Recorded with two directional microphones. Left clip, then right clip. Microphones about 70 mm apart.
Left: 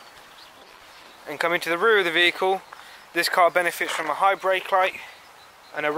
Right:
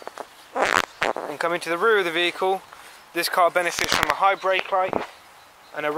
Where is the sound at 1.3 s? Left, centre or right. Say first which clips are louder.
Left 1 dB; centre.